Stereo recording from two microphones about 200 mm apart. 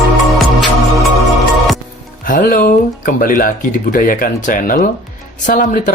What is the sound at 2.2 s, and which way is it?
Speech, 45° left (ahead or behind).